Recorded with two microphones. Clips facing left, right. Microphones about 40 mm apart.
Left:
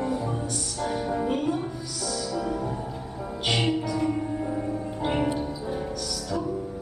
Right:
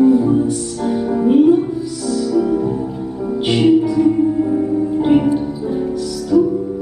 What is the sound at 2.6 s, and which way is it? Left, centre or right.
Music, centre.